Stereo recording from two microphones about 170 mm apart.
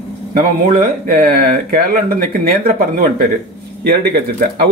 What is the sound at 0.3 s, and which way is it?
Speech, 60° right (ahead or behind).